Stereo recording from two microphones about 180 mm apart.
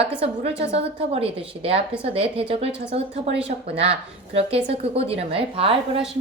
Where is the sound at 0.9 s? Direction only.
30° right (ahead or behind).